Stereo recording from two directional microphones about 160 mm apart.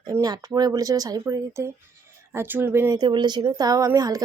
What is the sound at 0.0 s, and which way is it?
A woman's voice, 20° right (ahead or behind).